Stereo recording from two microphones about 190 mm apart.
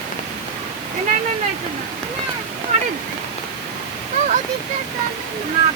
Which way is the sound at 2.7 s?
40° right (ahead or behind).